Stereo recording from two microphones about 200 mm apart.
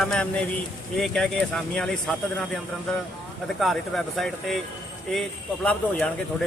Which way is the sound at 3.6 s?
Centre (ahead or behind).